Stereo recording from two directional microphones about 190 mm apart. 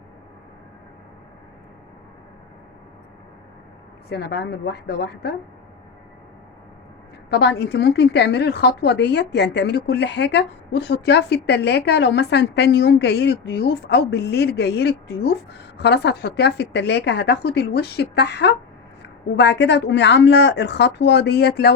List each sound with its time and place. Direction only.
4.1 s speech: 60° left (ahead or behind)
7.3 s a woman's voice: 60° left (ahead or behind)